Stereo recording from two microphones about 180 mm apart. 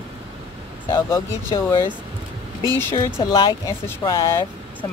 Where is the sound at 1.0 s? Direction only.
15° left (ahead or behind).